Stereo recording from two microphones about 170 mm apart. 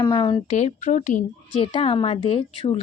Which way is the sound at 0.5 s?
45° left (ahead or behind).